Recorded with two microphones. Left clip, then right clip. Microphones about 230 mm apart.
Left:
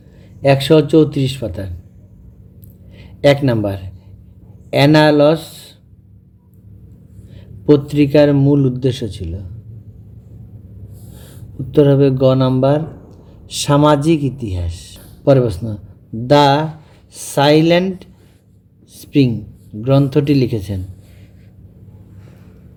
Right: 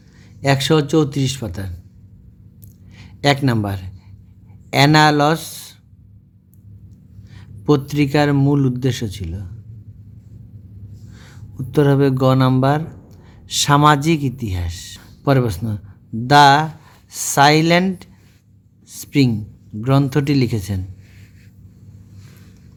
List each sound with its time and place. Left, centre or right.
0.4 s a man's voice: right
2.9 s a man's voice: right
7.3 s a man's voice: right
11.7 s a man's voice: right